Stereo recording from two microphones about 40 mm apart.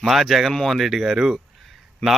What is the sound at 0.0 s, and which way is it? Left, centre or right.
Speech, centre.